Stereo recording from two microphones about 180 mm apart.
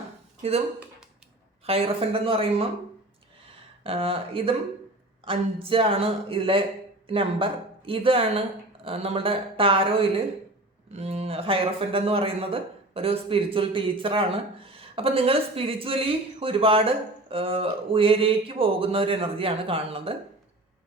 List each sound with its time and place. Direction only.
0.4 s speech: 35° right (ahead or behind)
1.6 s speech: 30° right (ahead or behind)
3.8 s speech: 30° right (ahead or behind)